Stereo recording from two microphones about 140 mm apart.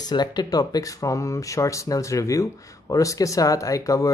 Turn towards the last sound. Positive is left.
turn(degrees=25)  # may be behind; listen again after turning